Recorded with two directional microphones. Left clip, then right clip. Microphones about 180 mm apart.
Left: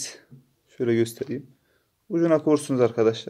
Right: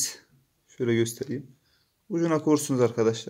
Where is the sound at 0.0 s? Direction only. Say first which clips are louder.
Right 4 dB; 25° right (ahead or behind).